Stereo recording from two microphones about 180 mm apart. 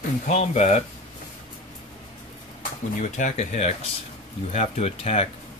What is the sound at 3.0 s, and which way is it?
Speech, 40° left (ahead or behind).